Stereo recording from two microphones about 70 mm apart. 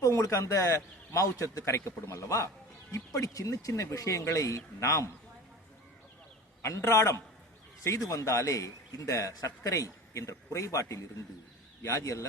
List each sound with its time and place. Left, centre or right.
0.0 s a man's voice: left
6.6 s a man's voice: left
7.9 s a man's voice: left